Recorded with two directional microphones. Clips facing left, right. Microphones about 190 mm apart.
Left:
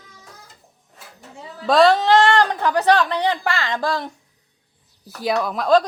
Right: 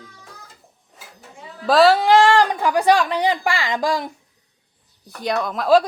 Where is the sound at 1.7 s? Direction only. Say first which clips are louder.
Right 1 dB; 5° right (ahead or behind).